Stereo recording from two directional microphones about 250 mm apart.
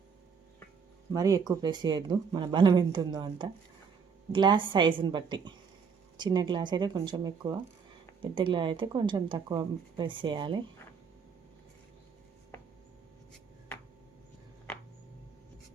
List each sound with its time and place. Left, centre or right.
1.1 s a woman's voice: centre